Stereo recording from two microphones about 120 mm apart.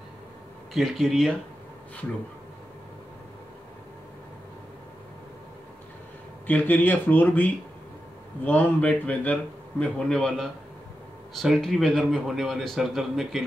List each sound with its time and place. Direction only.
0.7 s a man's voice: centre (ahead or behind)
6.4 s a man's voice: 15° left (ahead or behind); by 13.4 s centre (ahead or behind)